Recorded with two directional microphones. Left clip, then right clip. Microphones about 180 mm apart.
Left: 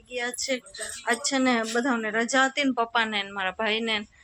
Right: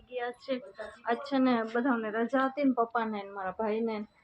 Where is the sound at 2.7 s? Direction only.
25° left (ahead or behind).